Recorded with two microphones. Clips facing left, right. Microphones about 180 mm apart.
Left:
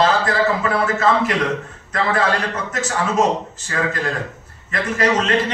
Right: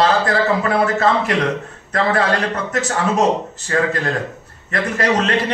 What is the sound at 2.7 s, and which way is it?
Speech, 35° right (ahead or behind).